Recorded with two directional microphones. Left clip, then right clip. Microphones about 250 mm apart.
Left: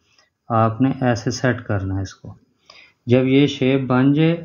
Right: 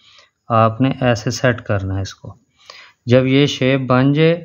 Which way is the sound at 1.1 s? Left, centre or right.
Right.